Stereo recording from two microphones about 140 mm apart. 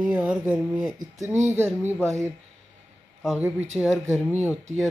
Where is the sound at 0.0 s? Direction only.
10° right (ahead or behind).